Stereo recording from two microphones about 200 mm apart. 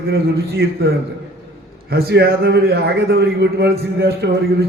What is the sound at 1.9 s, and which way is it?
A man's voice, 50° right (ahead or behind).